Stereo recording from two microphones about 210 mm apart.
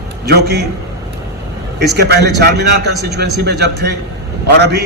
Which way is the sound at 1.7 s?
50° right (ahead or behind).